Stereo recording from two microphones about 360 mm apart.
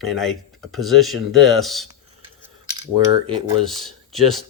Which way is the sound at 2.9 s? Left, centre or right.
Centre.